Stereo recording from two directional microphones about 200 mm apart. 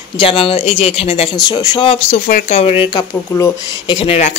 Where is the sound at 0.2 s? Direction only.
25° left (ahead or behind).